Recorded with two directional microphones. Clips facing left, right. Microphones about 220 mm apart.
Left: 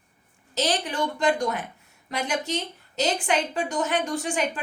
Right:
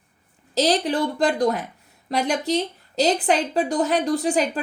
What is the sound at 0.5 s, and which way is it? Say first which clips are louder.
A woman's voice: right 6 dB; 35° right (ahead or behind).